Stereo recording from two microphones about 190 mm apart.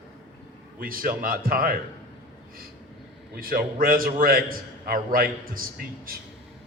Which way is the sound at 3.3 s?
50° right (ahead or behind).